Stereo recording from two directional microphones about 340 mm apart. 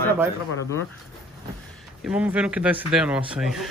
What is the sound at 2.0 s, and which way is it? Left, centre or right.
Speech, centre.